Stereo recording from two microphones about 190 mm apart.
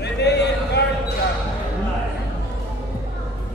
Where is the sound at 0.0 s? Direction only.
60° left (ahead or behind).